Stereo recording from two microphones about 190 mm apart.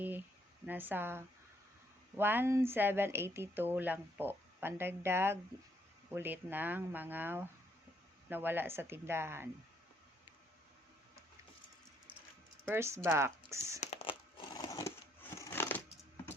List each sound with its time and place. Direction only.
0.0 s a sound: 10° right (ahead or behind)
2.1 s speech: 10° right (ahead or behind)
12.6 s speech: 15° right (ahead or behind)
13.8 s crumpling: 30° left (ahead or behind); by 15.8 s 10° left (ahead or behind)